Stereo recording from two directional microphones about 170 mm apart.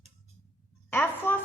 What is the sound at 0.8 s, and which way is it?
Speech, 10° left (ahead or behind).